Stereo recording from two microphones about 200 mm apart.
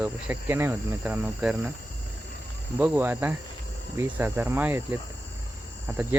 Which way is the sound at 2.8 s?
10° right (ahead or behind).